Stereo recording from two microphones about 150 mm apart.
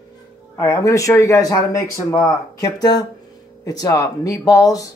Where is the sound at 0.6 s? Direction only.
20° left (ahead or behind).